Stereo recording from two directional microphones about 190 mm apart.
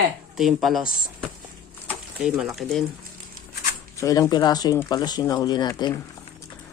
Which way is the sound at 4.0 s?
15° left (ahead or behind).